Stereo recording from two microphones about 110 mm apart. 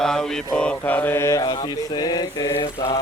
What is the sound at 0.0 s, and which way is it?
Mantra, 5° left (ahead or behind).